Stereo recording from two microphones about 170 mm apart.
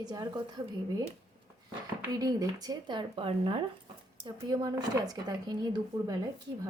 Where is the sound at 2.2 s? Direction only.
20° right (ahead or behind).